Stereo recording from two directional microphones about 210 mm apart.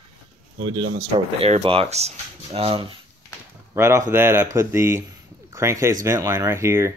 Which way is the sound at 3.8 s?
15° right (ahead or behind).